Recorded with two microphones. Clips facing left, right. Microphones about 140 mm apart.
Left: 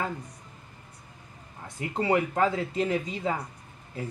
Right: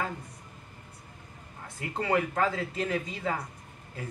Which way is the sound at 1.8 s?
20° left (ahead or behind).